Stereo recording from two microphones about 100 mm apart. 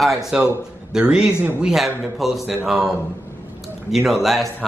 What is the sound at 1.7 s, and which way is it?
A man's voice, centre (ahead or behind).